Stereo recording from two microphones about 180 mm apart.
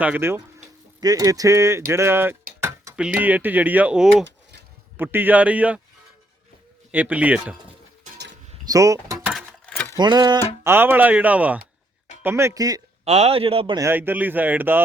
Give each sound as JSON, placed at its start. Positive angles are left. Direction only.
{"t": 0.0, "sound": "speech", "side_deg": -10}
{"t": 2.6, "sound": "a sound", "side_deg": -15}
{"t": 3.2, "sound": "speech", "side_deg": -10}
{"t": 6.9, "sound": "speech", "side_deg": -10}
{"t": 8.6, "sound": "door", "side_deg": -20}
{"t": 9.3, "sound": "a sound", "side_deg": 5}
{"t": 10.0, "sound": "speech", "side_deg": -25}
{"t": 10.6, "sound": "speech", "side_deg": -10}
{"t": 13.1, "sound": "a man's voice", "side_deg": -35}
{"t": 13.7, "sound": "speech", "side_deg": -15}